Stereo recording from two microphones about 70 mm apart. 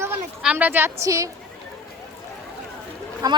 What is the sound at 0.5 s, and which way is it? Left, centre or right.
Speech, right.